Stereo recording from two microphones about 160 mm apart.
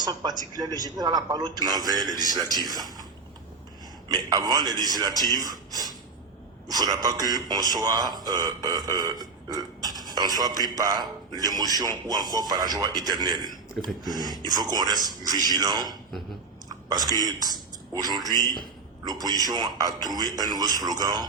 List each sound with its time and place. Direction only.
0.0 s a man's voice: 25° right (ahead or behind)
4.1 s a man's voice: 25° right (ahead or behind)
5.7 s a sound: 25° right (ahead or behind)
6.7 s a man's voice: 25° right (ahead or behind)
9.5 s burping: 25° right (ahead or behind)
10.1 s a man's voice: 25° right (ahead or behind)
17.1 s a man's voice: 25° right (ahead or behind)